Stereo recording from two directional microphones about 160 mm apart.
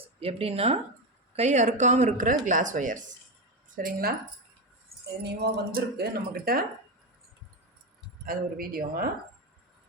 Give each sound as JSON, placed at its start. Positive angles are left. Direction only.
{"t": 0.2, "sound": "speech", "side_deg": -40}
{"t": 5.2, "sound": "speech", "side_deg": -90}
{"t": 8.3, "sound": "speech", "side_deg": -65}